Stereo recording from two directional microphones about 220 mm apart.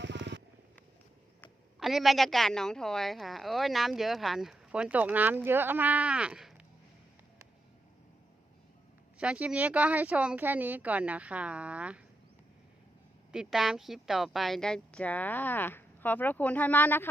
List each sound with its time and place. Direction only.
0.0 s a sound: 55° right (ahead or behind)
1.4 s a woman's voice: centre (ahead or behind)
9.1 s a woman's voice: 5° right (ahead or behind)
13.3 s speech: 5° right (ahead or behind)